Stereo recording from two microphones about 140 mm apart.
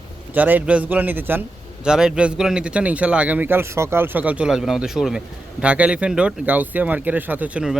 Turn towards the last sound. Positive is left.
turn(degrees=-5)  # may be behind; listen again after turning